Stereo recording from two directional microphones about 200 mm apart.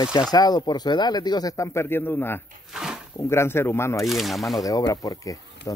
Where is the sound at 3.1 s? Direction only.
15° left (ahead or behind).